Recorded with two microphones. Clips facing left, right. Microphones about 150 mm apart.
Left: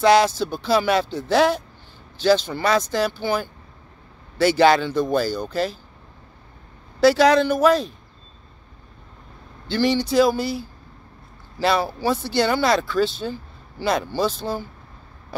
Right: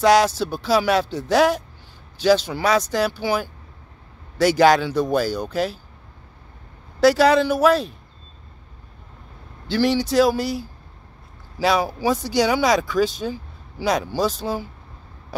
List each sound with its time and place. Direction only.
0.0 s speech: 5° right (ahead or behind)
7.0 s speech: 5° right (ahead or behind)
9.7 s speech: 5° right (ahead or behind)
11.5 s speech: 10° right (ahead or behind)